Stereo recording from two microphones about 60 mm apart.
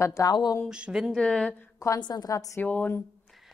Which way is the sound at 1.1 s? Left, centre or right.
Centre.